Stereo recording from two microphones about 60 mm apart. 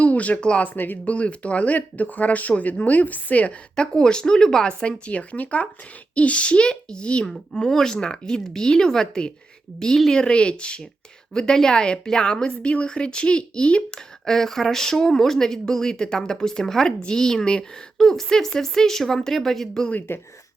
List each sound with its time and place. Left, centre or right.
0.0 s speech: left
3.8 s speech: centre
20.1 s speech: left